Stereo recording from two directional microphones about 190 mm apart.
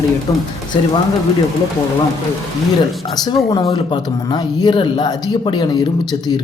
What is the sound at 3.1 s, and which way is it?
Speech, 20° left (ahead or behind).